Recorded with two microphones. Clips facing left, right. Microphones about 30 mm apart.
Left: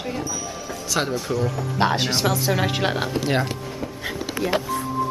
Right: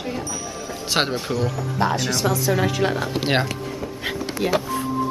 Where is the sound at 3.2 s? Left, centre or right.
Right.